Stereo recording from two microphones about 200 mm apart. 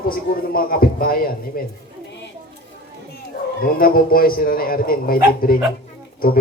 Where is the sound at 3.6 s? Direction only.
45° left (ahead or behind).